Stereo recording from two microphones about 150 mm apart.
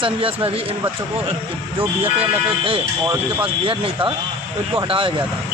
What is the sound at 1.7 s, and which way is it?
Speech, 40° right (ahead or behind).